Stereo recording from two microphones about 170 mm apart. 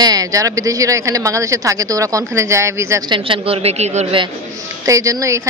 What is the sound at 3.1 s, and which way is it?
A woman's voice, 30° right (ahead or behind).